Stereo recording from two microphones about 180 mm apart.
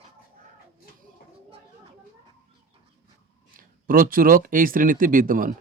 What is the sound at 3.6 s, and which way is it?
Speech, 50° right (ahead or behind).